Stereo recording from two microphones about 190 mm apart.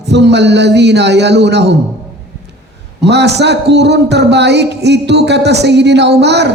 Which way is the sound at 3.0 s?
65° right (ahead or behind).